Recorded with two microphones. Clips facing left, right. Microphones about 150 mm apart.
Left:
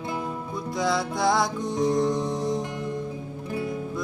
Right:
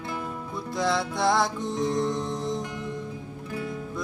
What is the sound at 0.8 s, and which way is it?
Music, centre (ahead or behind).